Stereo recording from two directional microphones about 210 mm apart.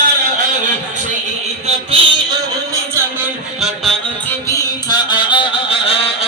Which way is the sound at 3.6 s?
Centre (ahead or behind).